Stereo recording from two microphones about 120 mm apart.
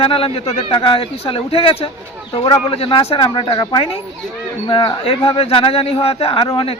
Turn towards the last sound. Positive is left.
turn(degrees=50)  # may be behind; listen again after turning